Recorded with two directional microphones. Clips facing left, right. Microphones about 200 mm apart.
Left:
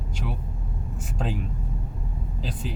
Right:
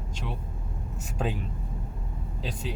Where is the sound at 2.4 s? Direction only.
Centre (ahead or behind).